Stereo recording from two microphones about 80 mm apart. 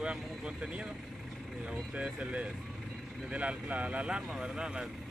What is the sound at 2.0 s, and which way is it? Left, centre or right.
Speech, centre.